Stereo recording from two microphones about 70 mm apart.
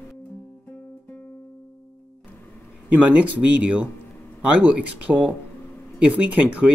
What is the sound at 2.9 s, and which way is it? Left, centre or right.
Speech, right.